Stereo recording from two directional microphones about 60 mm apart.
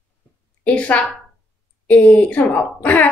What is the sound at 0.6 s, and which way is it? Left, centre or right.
A woman's voice, left.